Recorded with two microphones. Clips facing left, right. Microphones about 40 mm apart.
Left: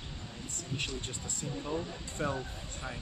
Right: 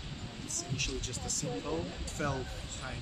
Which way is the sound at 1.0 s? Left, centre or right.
Left.